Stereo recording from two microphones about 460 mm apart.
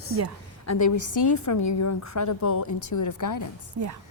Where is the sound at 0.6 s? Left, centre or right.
Left.